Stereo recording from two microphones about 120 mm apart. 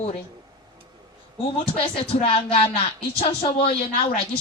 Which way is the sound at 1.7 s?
50° left (ahead or behind).